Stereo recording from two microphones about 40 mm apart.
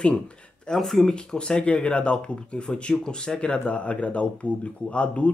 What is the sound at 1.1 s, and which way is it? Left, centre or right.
Speech, left.